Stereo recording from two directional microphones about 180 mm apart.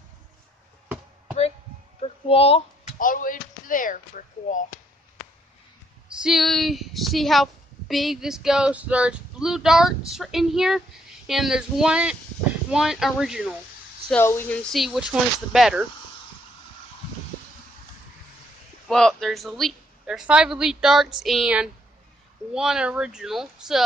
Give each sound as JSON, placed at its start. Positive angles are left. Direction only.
{"t": 2.0, "sound": "a sound", "side_deg": 30}
{"t": 3.0, "sound": "speech", "side_deg": 50}
{"t": 6.0, "sound": "female singing", "side_deg": 0}
{"t": 14.1, "sound": "female singing", "side_deg": 10}
{"t": 18.9, "sound": "female singing", "side_deg": 5}